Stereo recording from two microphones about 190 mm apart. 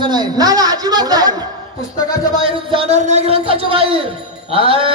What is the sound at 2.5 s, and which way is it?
A man's voice, 30° right (ahead or behind).